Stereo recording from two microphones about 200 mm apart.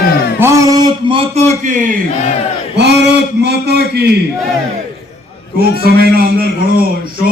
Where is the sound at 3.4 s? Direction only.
55° right (ahead or behind).